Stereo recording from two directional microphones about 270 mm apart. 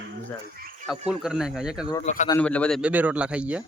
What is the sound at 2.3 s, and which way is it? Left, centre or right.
A man's voice, centre.